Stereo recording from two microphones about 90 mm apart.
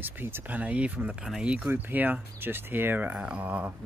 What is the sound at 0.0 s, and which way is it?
Speech, 25° right (ahead or behind).